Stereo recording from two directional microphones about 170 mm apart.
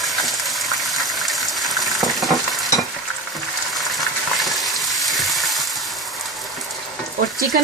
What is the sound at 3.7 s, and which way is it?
Frying, centre (ahead or behind).